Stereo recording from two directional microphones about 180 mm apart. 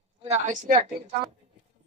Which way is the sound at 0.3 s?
45° right (ahead or behind).